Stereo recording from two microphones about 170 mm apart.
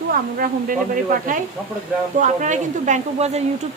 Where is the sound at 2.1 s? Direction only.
45° right (ahead or behind).